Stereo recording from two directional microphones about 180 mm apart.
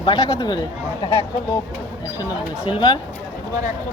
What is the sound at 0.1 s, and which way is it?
Speech, 20° left (ahead or behind).